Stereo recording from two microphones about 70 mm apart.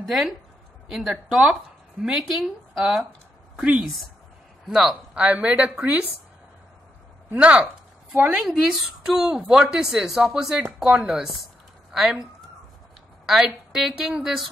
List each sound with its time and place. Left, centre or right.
0.0 s a woman's voice: centre
5.2 s a woman's voice: right
7.3 s a woman's voice: centre
8.4 s a woman's voice: centre